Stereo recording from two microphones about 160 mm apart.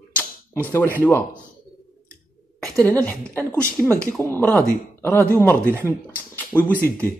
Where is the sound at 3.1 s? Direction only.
10° left (ahead or behind).